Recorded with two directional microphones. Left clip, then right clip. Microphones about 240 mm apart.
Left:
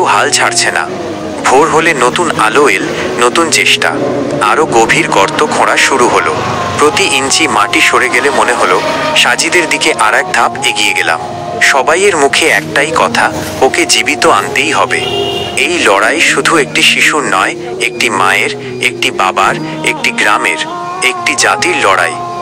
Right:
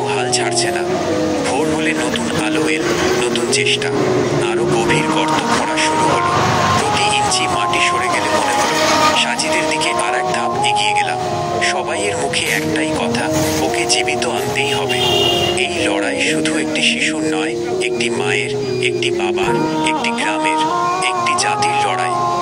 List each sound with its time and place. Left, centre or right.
0.0 s speech: left
9.8 s speech: left
11.6 s speech: left
19.2 s speech: left
21.0 s speech: left